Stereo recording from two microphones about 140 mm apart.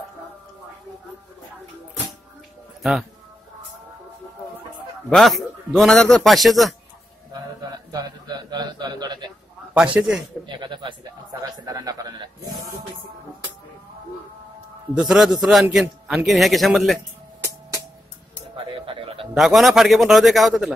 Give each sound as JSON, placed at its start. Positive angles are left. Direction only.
{"t": 2.8, "sound": "a man's voice", "side_deg": 0}
{"t": 5.1, "sound": "a man's voice", "side_deg": 0}
{"t": 7.9, "sound": "a man's voice", "side_deg": -30}
{"t": 9.9, "sound": "a man's voice", "side_deg": -5}
{"t": 10.4, "sound": "a man's voice", "side_deg": -35}
{"t": 15.0, "sound": "a man's voice", "side_deg": 0}
{"t": 18.9, "sound": "a sound", "side_deg": -40}
{"t": 19.3, "sound": "a man's voice", "side_deg": 0}